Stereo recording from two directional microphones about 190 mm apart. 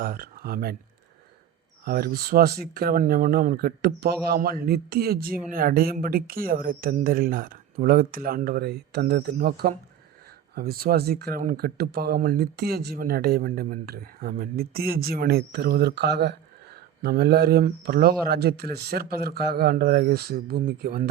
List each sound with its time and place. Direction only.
0.0 s speech: 50° right (ahead or behind)
1.8 s speech: 50° right (ahead or behind)